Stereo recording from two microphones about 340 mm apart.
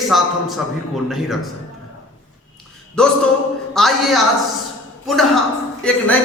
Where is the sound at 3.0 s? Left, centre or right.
Centre.